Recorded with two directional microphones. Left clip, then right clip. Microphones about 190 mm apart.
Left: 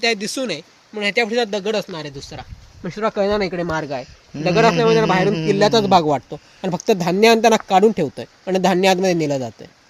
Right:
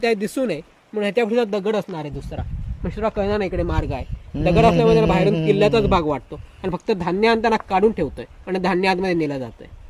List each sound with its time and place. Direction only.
0.0 s speech: 50° right (ahead or behind)
2.8 s speech: 20° left (ahead or behind)
3.2 s speech: 40° left (ahead or behind)
3.6 s speech: 25° left (ahead or behind)
5.3 s speech: 25° right (ahead or behind)
5.7 s speech: 45° left (ahead or behind)